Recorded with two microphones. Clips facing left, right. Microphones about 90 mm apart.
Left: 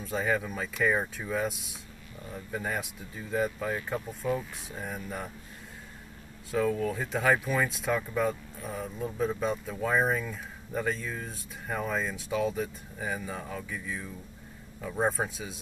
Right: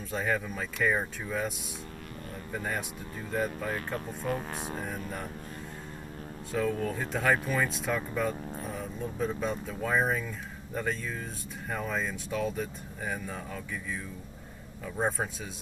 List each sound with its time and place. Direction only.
0.1 s speech: centre (ahead or behind)
2.5 s speech: centre (ahead or behind)
4.3 s speech: 60° right (ahead or behind)
4.8 s speech: centre (ahead or behind)
6.5 s speech: centre (ahead or behind)